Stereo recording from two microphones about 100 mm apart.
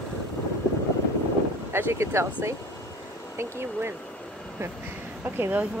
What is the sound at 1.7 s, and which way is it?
Speech, 25° right (ahead or behind).